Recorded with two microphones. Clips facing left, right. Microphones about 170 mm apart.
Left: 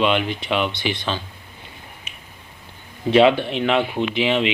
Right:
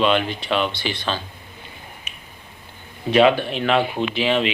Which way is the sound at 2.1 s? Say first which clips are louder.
Even; 30° left (ahead or behind).